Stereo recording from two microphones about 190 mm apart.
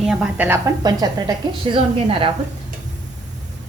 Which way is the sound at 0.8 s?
20° right (ahead or behind).